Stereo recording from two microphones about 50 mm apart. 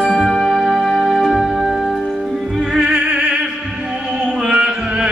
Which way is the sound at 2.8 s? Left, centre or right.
Centre.